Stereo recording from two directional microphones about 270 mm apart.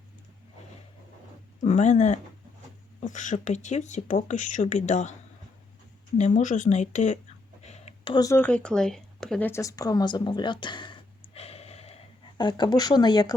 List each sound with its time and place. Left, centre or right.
1.6 s speech: left
6.1 s speech: left